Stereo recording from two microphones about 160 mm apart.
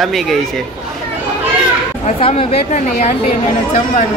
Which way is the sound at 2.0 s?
35° left (ahead or behind).